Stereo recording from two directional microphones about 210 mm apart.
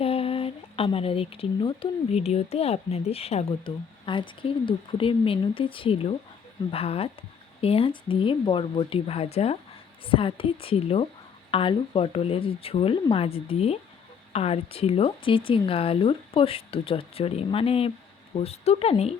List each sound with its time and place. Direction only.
0.0 s speech: 25° left (ahead or behind)